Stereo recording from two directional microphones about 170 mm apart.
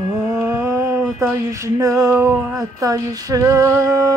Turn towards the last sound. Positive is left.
turn(degrees=-20)  # may be behind; listen again after turning